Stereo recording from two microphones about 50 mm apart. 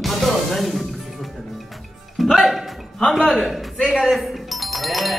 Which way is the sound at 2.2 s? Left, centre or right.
Centre.